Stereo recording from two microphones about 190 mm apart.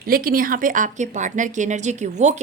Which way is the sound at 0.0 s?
50° right (ahead or behind).